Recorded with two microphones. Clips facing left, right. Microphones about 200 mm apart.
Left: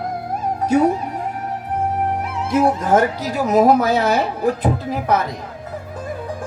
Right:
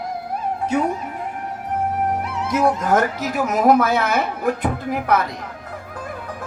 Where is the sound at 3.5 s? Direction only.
40° left (ahead or behind).